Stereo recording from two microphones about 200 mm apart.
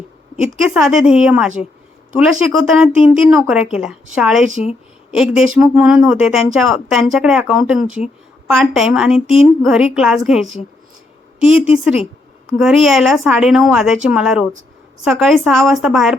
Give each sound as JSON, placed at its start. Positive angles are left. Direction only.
{"t": 0.6, "sound": "speech", "side_deg": -5}
{"t": 11.5, "sound": "a woman's voice", "side_deg": 30}
{"t": 12.5, "sound": "speech", "side_deg": 0}